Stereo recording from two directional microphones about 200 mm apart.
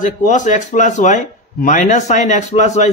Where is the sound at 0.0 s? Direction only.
40° left (ahead or behind).